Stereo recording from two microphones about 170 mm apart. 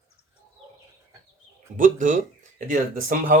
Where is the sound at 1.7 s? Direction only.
50° right (ahead or behind).